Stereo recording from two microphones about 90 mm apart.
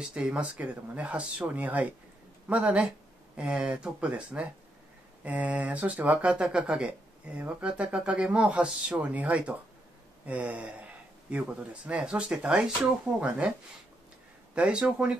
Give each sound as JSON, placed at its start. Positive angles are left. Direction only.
{"t": 0.1, "sound": "speech", "side_deg": -10}
{"t": 14.5, "sound": "speech", "side_deg": -10}